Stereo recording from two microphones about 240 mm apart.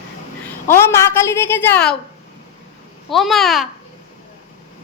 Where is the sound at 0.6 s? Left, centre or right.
Centre.